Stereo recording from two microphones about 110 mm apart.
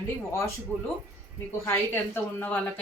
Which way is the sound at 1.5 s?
25° left (ahead or behind).